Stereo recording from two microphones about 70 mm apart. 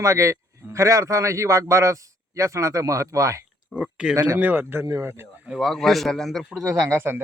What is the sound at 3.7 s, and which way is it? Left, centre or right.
Speech, centre.